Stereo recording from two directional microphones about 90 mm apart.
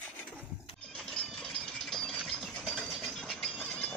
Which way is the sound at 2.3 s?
Centre (ahead or behind).